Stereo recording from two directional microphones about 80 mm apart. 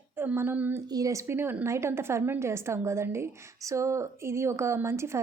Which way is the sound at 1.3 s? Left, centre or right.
Right.